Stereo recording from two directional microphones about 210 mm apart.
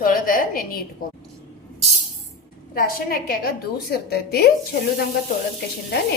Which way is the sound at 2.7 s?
45° left (ahead or behind).